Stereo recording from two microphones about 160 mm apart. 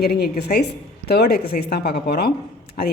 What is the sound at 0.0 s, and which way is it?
A woman's voice, 85° left.